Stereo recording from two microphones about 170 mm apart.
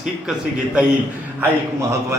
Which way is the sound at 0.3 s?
5° right (ahead or behind).